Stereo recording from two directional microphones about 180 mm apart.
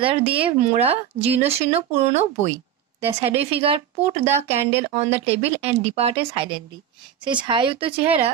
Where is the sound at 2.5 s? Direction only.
15° right (ahead or behind).